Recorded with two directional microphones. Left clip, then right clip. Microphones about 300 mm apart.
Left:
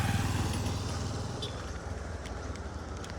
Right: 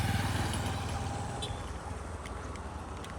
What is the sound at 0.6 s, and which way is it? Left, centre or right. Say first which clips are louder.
Vehicle: right 1 dB; right.